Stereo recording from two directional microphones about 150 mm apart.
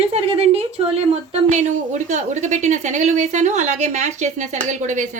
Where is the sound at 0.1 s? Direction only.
45° right (ahead or behind).